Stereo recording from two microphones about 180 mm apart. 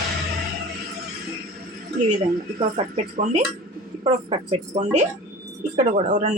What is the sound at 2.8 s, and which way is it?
A woman's voice, 35° right (ahead or behind).